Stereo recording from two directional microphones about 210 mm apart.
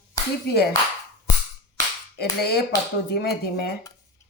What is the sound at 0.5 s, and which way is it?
Speech, 50° left (ahead or behind).